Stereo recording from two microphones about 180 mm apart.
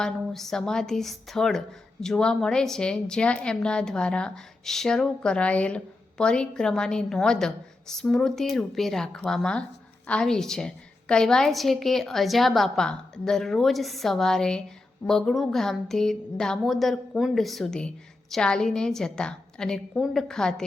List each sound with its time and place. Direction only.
0.0 s a woman's voice: centre (ahead or behind)